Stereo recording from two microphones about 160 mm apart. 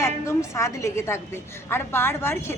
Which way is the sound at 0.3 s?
15° left (ahead or behind).